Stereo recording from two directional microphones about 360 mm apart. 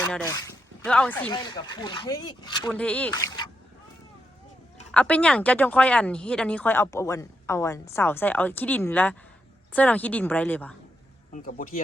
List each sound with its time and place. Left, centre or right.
0.0 s speech: centre
4.9 s speech: centre
11.3 s speech: left